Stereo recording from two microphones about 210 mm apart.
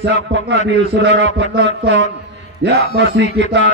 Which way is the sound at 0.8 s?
60° right (ahead or behind).